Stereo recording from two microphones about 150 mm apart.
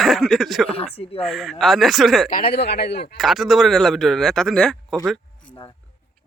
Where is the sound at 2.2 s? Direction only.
70° left (ahead or behind); by 3.2 s 90° left.